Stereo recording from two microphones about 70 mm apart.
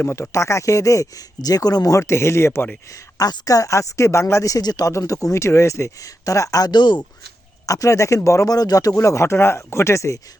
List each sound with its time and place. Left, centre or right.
0.0 s speech: left
2.0 s speech: left
3.2 s a woman's voice: left
4.9 s speech: left
6.7 s speech: left
7.7 s speech: left
8.5 s speech: left